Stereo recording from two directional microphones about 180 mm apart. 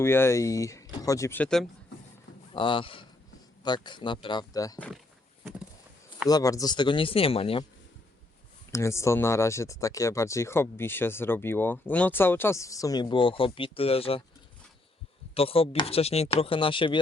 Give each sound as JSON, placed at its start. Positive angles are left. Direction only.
{"t": 0.0, "sound": "speech", "side_deg": 15}
{"t": 2.5, "sound": "speech", "side_deg": 30}
{"t": 6.2, "sound": "speech", "side_deg": 20}
{"t": 8.7, "sound": "speech", "side_deg": 15}
{"t": 15.4, "sound": "speech", "side_deg": 30}